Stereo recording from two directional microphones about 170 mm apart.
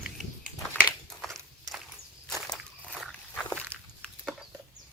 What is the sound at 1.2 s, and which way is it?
Walk, centre (ahead or behind).